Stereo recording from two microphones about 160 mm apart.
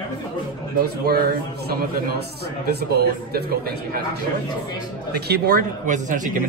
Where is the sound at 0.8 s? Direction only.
75° right (ahead or behind).